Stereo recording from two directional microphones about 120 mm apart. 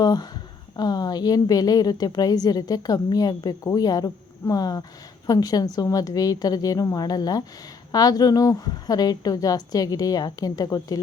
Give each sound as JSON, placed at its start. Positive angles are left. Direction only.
{"t": 0.0, "sound": "a woman's voice", "side_deg": 35}